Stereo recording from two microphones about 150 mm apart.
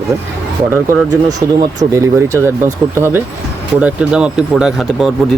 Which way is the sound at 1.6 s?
20° right (ahead or behind).